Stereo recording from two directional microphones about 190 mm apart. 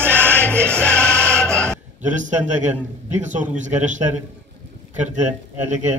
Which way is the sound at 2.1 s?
40° right (ahead or behind).